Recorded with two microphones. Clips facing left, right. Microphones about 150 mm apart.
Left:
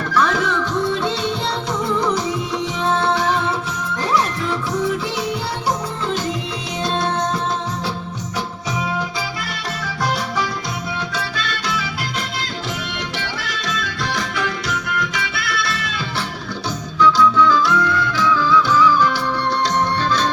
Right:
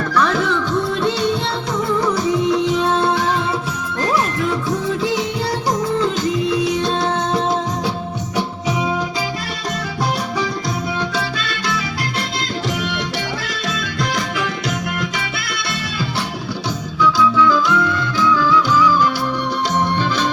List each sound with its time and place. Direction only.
15.4 s music: 20° right (ahead or behind)
17.0 s music: 10° right (ahead or behind)